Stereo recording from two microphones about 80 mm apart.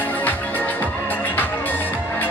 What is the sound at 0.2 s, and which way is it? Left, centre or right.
Music, left.